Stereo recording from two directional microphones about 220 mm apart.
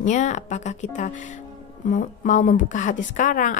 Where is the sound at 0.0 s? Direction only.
35° left (ahead or behind).